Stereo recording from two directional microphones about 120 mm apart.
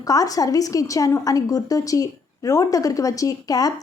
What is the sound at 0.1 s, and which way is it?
A woman's voice, 30° left (ahead or behind).